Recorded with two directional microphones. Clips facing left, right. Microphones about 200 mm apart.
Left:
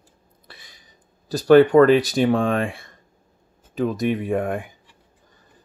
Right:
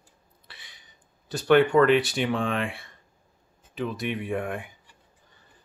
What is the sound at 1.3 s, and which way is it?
Speech, 35° left (ahead or behind).